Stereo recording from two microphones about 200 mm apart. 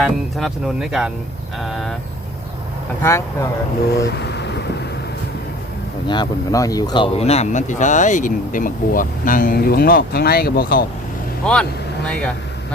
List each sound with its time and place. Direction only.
0.0 s speech: centre (ahead or behind)
3.0 s speech: 15° left (ahead or behind)
4.2 s vehicle: 60° left (ahead or behind)
6.1 s speech: 20° left (ahead or behind); by 10.8 s 45° left (ahead or behind)
11.4 s speech: 5° left (ahead or behind)